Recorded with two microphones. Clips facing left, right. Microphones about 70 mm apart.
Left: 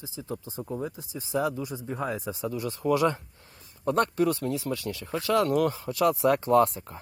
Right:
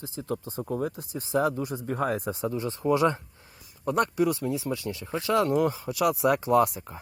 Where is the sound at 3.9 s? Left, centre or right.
Centre.